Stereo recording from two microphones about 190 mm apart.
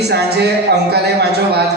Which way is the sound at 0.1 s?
60° right (ahead or behind).